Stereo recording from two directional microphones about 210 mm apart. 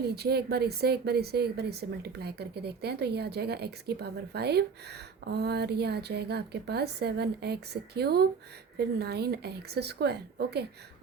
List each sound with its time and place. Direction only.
0.0 s speech: 50° right (ahead or behind)